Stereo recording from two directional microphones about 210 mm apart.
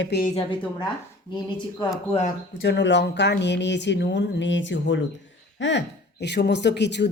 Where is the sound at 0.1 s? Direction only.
55° left (ahead or behind).